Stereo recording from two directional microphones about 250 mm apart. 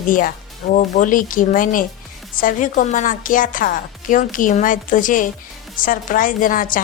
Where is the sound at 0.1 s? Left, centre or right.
Left.